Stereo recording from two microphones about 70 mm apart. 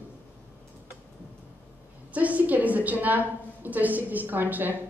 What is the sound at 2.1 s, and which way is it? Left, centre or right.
A woman's voice, right.